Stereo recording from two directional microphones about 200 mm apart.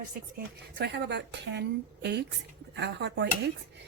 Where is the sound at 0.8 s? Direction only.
60° right (ahead or behind).